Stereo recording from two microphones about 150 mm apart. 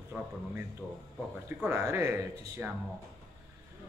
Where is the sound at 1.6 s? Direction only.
15° right (ahead or behind).